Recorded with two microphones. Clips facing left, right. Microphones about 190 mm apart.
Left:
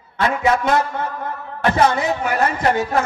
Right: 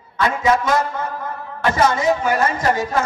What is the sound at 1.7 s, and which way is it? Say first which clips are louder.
A man's voice: right 1 dB; 60° left (ahead or behind).